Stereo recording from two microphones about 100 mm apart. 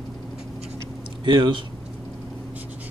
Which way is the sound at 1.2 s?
55° right (ahead or behind).